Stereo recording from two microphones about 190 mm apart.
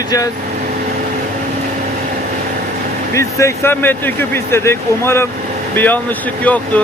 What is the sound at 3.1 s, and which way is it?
Speech, 15° left (ahead or behind).